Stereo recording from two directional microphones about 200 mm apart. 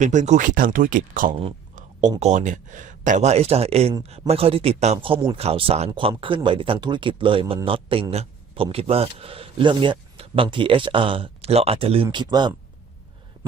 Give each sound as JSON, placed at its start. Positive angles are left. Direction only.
{"t": 0.0, "sound": "speech", "side_deg": -40}
{"t": 1.3, "sound": "speech", "side_deg": -30}